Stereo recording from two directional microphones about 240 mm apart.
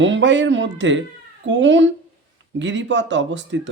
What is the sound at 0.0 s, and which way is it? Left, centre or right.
Speech, right.